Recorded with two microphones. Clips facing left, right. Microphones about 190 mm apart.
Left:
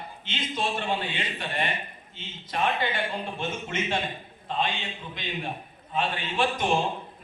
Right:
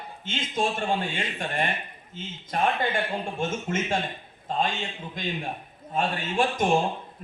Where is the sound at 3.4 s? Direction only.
45° right (ahead or behind).